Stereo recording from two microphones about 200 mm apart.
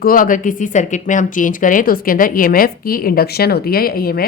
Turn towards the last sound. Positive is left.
turn(degrees=50)  # may be behind; listen again after turning